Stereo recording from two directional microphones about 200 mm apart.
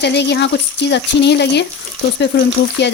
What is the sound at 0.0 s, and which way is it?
Speech, 55° left (ahead or behind).